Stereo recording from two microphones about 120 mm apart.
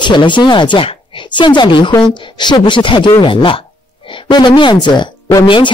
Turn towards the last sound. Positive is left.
turn(degrees=45)  # may be behind; listen again after turning